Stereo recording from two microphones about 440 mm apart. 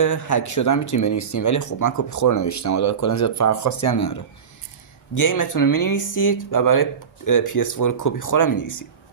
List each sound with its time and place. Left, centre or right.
0.0 s speech: left